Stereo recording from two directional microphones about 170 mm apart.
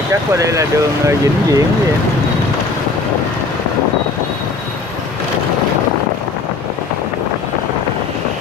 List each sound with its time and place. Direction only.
0.1 s speech: 20° right (ahead or behind)